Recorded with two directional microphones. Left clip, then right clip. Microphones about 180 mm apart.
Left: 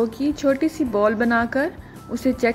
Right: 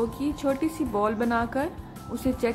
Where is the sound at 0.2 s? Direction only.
15° left (ahead or behind).